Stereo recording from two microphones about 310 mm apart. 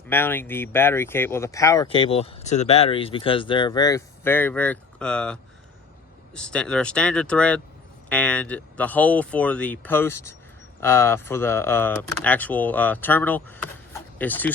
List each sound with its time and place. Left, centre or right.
0.1 s speech: centre